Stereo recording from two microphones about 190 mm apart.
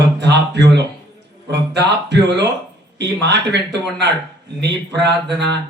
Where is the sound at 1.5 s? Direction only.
65° right (ahead or behind).